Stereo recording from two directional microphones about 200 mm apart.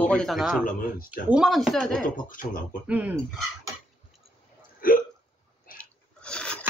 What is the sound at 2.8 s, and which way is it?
Speech, 5° right (ahead or behind).